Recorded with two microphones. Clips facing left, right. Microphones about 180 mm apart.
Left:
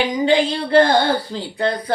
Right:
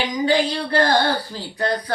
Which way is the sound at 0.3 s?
25° left (ahead or behind).